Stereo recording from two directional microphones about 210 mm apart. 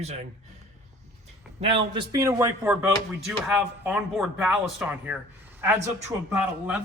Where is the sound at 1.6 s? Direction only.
25° right (ahead or behind).